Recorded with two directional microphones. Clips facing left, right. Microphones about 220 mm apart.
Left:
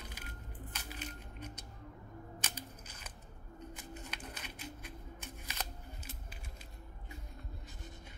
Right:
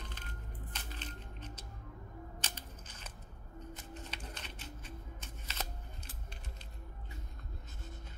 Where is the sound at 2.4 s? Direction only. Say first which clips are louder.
Left 1 dB; 10° left (ahead or behind).